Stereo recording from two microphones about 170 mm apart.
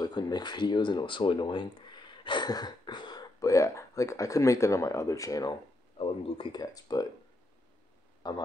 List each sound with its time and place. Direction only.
0.0 s speech: 25° left (ahead or behind)
5.9 s speech: 30° left (ahead or behind)
8.2 s speech: 25° left (ahead or behind)